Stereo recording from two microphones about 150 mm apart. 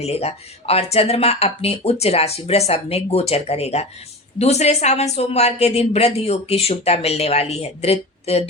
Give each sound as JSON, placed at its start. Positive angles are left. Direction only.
{"t": 0.0, "sound": "speech", "side_deg": 45}